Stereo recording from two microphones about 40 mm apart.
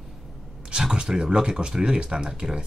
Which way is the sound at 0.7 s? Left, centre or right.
Centre.